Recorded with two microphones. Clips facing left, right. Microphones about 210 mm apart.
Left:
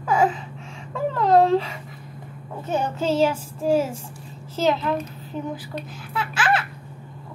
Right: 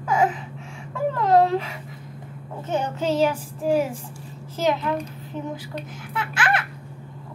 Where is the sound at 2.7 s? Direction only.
15° right (ahead or behind).